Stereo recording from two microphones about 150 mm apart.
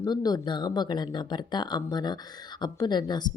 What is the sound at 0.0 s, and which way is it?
Speech, 25° left (ahead or behind).